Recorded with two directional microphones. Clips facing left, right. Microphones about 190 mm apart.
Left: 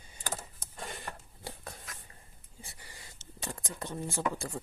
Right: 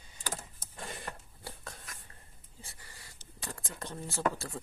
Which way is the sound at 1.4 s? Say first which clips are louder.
Left 2 dB; 10° left (ahead or behind).